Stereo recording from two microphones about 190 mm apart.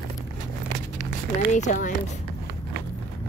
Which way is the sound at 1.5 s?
40° left (ahead or behind).